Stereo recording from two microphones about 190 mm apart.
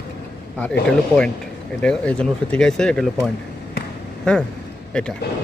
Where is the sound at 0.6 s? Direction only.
5° left (ahead or behind).